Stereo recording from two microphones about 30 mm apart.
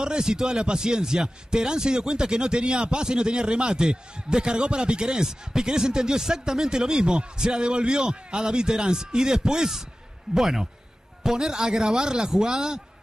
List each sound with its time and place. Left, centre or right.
0.0 s speech: right